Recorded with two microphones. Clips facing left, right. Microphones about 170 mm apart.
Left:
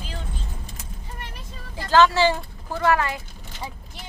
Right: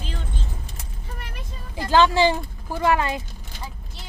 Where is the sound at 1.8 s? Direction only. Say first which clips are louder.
Even; 15° right (ahead or behind).